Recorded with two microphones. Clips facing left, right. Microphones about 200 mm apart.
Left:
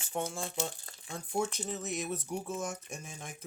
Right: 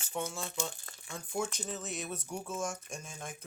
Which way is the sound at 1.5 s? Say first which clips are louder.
Left 3 dB; 60° left (ahead or behind).